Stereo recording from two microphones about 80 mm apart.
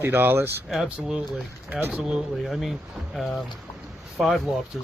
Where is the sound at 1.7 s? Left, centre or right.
Right.